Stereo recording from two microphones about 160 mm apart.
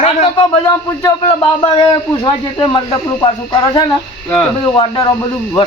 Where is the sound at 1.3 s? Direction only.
30° left (ahead or behind).